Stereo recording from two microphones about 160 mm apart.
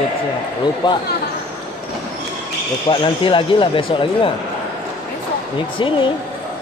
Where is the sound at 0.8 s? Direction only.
25° left (ahead or behind).